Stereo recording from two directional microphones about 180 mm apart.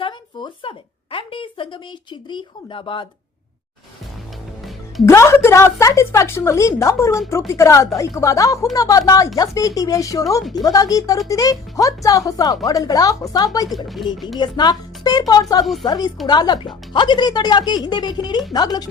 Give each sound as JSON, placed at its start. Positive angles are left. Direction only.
{"t": 0.0, "sound": "a sound", "side_deg": 25}
{"t": 2.3, "sound": "speech", "side_deg": 30}
{"t": 5.0, "sound": "a woman's voice", "side_deg": 15}
{"t": 13.7, "sound": "speech", "side_deg": 0}
{"t": 14.3, "sound": "speech", "side_deg": 25}